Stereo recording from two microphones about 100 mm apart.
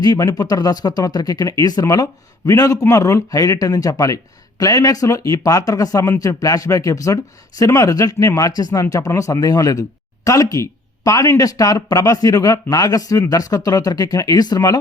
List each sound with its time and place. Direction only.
0.0 s a man's voice: 40° left (ahead or behind)